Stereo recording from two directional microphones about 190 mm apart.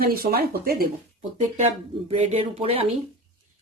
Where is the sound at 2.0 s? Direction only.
35° right (ahead or behind).